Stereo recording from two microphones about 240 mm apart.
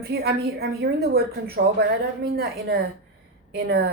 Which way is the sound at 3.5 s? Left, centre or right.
Right.